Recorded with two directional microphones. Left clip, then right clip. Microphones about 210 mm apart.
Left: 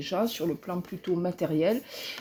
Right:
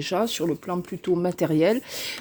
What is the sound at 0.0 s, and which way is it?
Speech, 50° right (ahead or behind).